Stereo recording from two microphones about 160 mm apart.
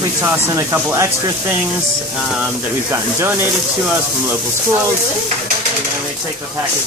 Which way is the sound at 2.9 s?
15° right (ahead or behind).